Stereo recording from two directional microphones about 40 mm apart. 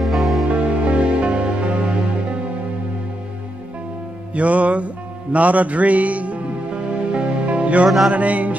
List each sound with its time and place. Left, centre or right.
0.0 s music: centre
0.5 s music: right
4.3 s music: right